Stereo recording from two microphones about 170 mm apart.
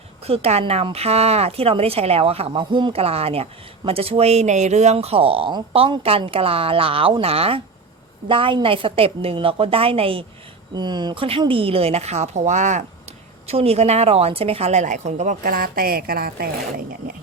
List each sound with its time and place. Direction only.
0.3 s a woman's voice: 35° right (ahead or behind); by 16.8 s 60° right (ahead or behind)